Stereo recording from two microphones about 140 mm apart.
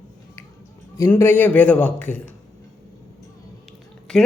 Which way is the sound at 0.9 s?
20° left (ahead or behind).